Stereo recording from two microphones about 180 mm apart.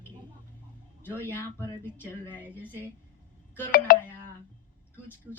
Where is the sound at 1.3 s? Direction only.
15° left (ahead or behind).